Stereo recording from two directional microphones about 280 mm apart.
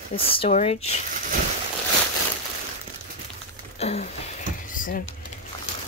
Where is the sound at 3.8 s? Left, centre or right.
Left.